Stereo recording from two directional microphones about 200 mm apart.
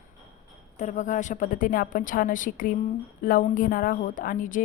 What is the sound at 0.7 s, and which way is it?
A woman's voice, 40° left (ahead or behind).